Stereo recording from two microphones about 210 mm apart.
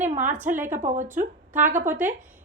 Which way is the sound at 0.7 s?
35° right (ahead or behind).